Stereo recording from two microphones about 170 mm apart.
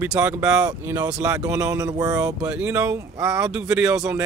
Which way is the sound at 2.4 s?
5° right (ahead or behind).